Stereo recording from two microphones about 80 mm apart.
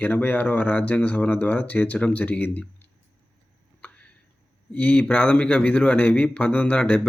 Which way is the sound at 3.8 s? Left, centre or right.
Centre.